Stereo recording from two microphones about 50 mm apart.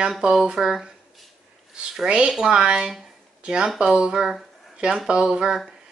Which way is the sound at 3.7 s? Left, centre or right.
Centre.